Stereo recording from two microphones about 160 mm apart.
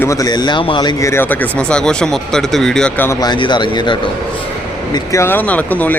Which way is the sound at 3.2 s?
30° left (ahead or behind).